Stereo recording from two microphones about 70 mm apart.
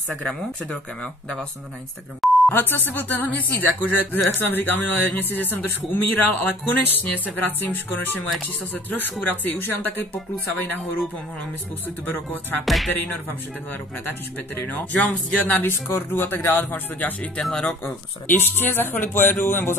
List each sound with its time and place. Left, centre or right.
2.2 s beep: centre
2.5 s speech: left
12.6 s music: centre
14.5 s speech: left
17.4 s speech: centre
17.8 s speech: left